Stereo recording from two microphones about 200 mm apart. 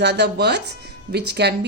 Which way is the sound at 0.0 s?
55° right (ahead or behind).